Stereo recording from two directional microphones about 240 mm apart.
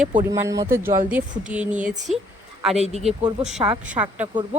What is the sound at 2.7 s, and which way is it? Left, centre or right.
Speech, right.